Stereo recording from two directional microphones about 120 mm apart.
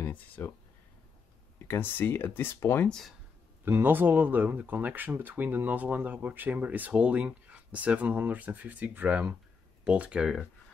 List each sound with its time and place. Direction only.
0.0 s speech: 15° left (ahead or behind)
1.7 s speech: 15° left (ahead or behind)
2.9 s speech: 5° left (ahead or behind)
3.6 s speech: 20° right (ahead or behind)